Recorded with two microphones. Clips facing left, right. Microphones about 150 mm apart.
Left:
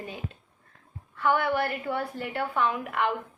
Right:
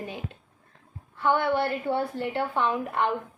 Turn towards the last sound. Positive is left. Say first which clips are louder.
# right 1 dB
turn(degrees=-30)  # may be behind; listen again after turning